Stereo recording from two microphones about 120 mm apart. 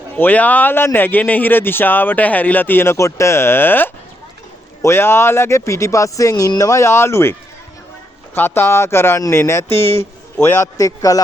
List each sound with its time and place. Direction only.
0.2 s speech: 15° left (ahead or behind)
8.4 s speech: 20° left (ahead or behind)